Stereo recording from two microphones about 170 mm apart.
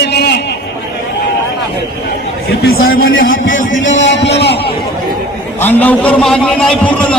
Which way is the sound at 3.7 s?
90° left.